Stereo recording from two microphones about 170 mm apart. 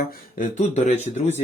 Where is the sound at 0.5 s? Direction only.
45° left (ahead or behind).